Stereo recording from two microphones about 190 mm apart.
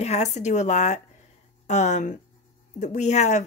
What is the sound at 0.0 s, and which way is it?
Speech, 35° left (ahead or behind).